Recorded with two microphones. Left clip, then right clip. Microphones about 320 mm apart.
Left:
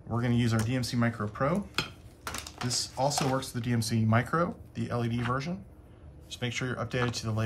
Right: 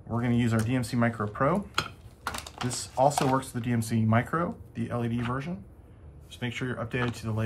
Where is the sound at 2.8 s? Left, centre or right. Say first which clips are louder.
Right 6 dB; centre.